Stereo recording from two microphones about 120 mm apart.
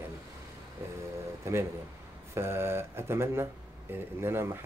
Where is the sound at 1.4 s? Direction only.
20° right (ahead or behind).